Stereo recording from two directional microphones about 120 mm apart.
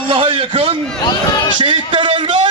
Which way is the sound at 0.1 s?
50° right (ahead or behind).